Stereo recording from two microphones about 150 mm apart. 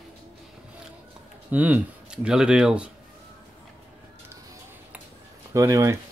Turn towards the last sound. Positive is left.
turn(degrees=-20)  # may be behind; listen again after turning